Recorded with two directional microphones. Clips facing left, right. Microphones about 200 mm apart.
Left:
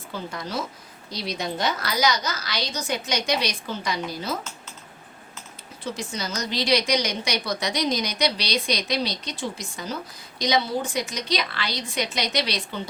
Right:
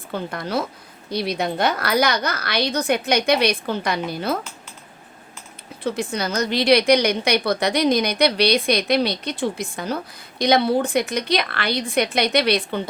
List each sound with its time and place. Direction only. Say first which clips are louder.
0.1 s a woman's voice: right 6 dB; 60° right (ahead or behind)
5.8 s a woman's voice: right 7 dB; 60° right (ahead or behind)